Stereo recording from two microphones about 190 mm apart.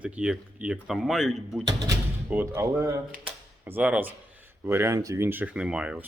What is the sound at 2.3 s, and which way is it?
Speech, 15° right (ahead or behind).